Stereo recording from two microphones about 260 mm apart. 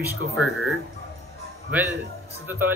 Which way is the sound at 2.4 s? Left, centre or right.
Centre.